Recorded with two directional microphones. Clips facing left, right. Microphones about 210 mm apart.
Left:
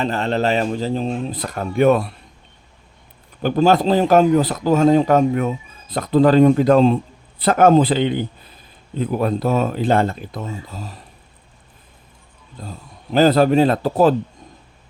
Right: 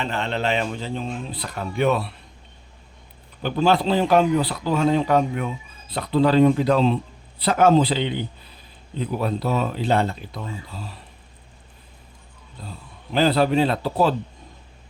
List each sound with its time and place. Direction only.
0.0 s speech: 40° left (ahead or behind)
3.4 s speech: 45° left (ahead or behind)
12.6 s speech: 45° left (ahead or behind)